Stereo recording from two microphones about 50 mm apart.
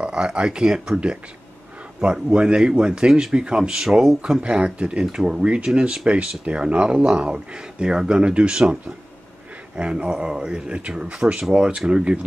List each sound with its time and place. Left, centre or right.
0.0 s a man's voice: centre
4.2 s a man's voice: centre